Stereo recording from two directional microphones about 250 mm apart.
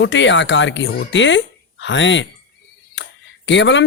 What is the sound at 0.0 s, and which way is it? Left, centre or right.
Speech, left.